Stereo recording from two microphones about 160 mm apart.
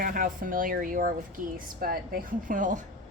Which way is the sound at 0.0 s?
60° right (ahead or behind).